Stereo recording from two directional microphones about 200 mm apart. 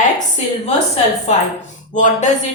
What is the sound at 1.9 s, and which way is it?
Speech, 40° left (ahead or behind).